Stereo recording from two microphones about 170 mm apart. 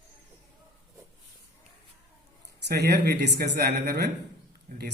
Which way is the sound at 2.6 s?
75° right (ahead or behind).